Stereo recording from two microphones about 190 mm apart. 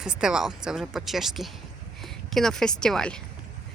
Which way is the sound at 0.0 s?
5° right (ahead or behind).